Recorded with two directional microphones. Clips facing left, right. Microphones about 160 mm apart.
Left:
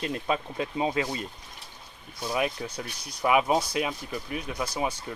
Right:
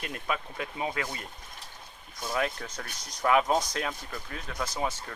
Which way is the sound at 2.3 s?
15° left (ahead or behind).